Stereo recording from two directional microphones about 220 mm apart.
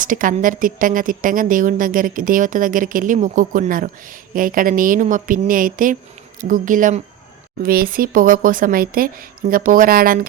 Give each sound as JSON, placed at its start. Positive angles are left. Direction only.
{"t": 0.0, "sound": "speech", "side_deg": -40}